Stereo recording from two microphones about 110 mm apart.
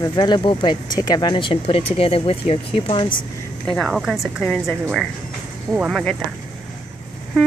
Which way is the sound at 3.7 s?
Centre (ahead or behind).